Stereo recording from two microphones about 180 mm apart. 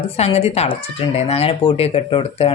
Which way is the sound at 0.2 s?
35° left (ahead or behind).